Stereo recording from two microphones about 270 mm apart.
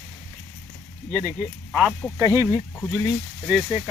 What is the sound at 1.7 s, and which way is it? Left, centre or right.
Speech, centre.